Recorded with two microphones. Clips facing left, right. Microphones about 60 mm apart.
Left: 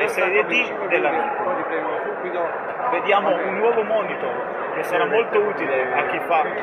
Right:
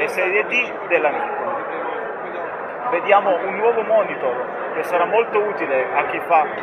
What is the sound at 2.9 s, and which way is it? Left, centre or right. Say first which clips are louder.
Speech: right 4 dB; right.